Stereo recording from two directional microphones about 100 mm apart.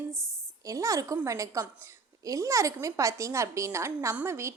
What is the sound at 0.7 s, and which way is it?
A woman's voice, 35° right (ahead or behind).